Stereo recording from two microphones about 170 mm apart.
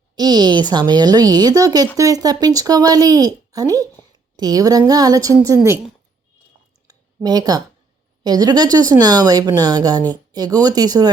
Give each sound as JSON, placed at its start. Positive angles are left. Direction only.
{"t": 0.2, "sound": "speech", "side_deg": -25}
{"t": 6.8, "sound": "a sound", "side_deg": -20}
{"t": 8.2, "sound": "speech", "side_deg": -25}